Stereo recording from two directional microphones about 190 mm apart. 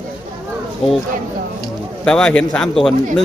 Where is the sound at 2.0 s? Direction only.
5° left (ahead or behind).